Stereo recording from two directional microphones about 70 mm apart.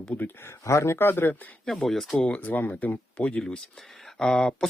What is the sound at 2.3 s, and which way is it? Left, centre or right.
Speech, left.